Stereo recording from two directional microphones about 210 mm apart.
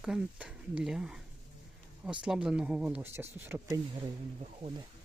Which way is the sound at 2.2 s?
5° right (ahead or behind).